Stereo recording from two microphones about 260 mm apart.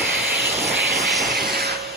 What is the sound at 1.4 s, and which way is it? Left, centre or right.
Vehicle, right.